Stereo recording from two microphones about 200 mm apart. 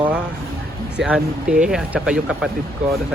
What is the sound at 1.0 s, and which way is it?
Speech, 5° right (ahead or behind).